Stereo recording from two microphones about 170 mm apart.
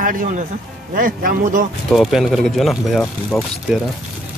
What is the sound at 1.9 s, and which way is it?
Speech, centre (ahead or behind).